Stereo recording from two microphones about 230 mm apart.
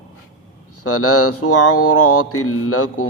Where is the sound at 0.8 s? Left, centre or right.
Left.